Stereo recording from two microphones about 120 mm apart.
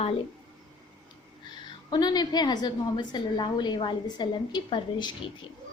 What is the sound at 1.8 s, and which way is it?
A woman's voice, 35° left (ahead or behind).